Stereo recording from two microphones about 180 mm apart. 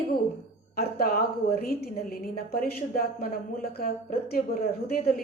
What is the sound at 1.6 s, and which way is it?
A woman's voice, 60° left (ahead or behind).